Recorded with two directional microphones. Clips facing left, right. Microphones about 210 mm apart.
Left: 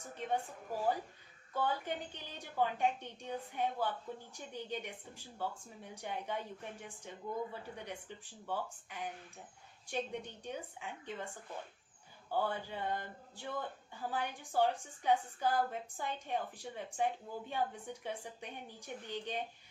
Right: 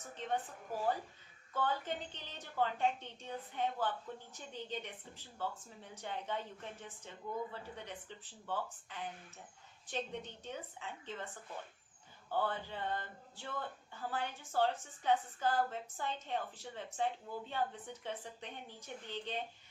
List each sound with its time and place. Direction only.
0.1 s speech: 10° left (ahead or behind)
12.3 s speech: 10° left (ahead or behind)